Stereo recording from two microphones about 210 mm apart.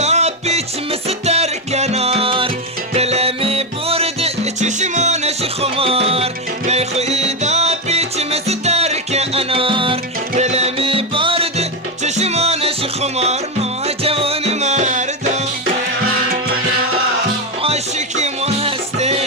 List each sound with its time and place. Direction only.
0.0 s music: 30° right (ahead or behind)
17.6 s music: 30° right (ahead or behind)